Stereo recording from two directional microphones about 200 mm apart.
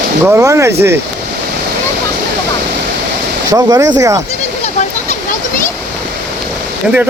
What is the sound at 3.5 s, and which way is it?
Speech, 20° right (ahead or behind).